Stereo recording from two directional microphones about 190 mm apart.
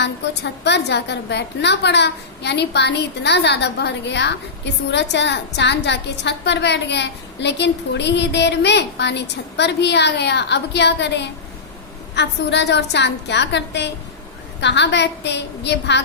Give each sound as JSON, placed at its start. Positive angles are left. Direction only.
{"t": 0.0, "sound": "a woman's voice", "side_deg": 65}